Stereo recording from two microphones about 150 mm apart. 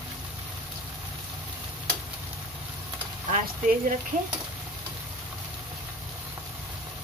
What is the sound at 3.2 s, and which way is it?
Speech, 55° right (ahead or behind).